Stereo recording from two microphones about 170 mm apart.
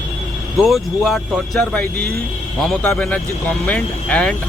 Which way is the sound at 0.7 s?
Centre (ahead or behind).